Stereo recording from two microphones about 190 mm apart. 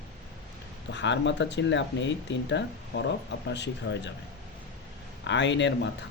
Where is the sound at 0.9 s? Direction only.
70° left (ahead or behind).